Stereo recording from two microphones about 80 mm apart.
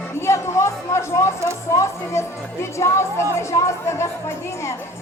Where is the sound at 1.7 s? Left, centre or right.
Left.